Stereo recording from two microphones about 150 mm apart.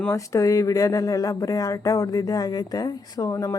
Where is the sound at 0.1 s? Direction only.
20° left (ahead or behind).